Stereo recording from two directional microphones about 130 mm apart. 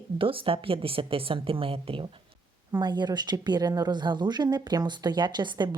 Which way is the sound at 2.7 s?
35° right (ahead or behind).